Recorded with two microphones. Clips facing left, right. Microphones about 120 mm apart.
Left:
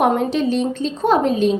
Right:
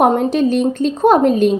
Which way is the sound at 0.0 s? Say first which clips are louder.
Right 4 dB; 45° right (ahead or behind).